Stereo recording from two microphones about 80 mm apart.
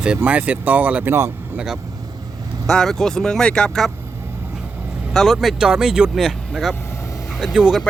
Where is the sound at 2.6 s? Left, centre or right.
Centre.